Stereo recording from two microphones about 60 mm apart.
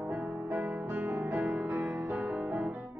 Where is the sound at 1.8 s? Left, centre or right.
Right.